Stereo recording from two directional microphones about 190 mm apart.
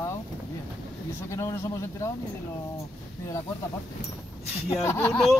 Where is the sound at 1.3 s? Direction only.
15° left (ahead or behind).